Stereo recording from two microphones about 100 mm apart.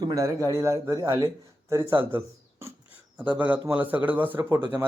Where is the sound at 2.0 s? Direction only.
25° right (ahead or behind).